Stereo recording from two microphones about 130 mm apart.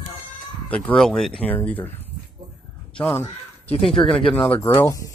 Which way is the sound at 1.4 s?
10° left (ahead or behind).